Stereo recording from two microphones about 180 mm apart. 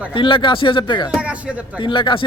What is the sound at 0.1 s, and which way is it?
A man's voice, 30° left (ahead or behind).